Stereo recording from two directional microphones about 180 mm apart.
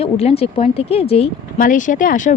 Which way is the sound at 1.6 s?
50° left (ahead or behind).